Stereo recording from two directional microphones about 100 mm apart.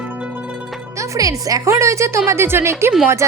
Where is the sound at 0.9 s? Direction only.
30° right (ahead or behind).